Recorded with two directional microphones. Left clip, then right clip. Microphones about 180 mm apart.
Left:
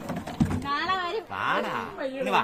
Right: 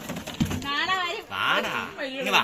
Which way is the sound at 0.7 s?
25° right (ahead or behind).